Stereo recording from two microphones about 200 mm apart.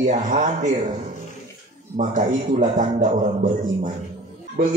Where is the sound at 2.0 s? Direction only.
40° right (ahead or behind).